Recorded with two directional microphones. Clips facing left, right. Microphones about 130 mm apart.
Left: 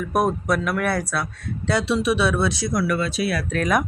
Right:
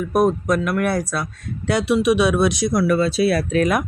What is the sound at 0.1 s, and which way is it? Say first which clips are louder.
Speech: right 3 dB; 5° left (ahead or behind).